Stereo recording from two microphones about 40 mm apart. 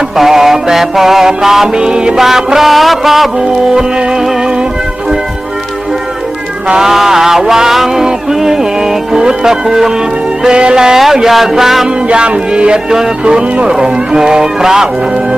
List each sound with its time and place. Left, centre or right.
0.2 s music: centre
2.1 s music: centre
3.3 s music: right
6.7 s music: centre
10.4 s music: right; by 11.9 s centre
11.9 s music: right